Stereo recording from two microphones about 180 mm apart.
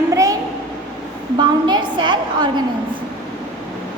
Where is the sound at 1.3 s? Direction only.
25° right (ahead or behind).